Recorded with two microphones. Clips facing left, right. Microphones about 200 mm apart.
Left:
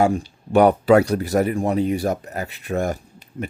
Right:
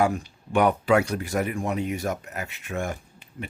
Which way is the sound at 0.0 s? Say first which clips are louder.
Left 5 dB; 30° left (ahead or behind).